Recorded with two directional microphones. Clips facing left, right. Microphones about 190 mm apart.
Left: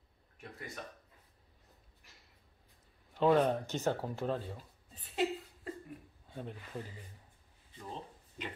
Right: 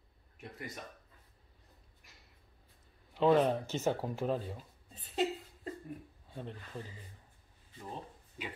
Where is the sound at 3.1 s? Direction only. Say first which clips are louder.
Right 1 dB; centre (ahead or behind).